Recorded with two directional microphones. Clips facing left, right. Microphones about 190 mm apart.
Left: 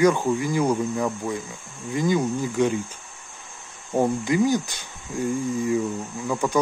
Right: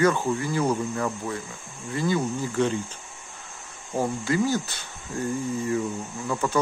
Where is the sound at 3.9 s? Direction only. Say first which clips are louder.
Left 4 dB; 20° left (ahead or behind).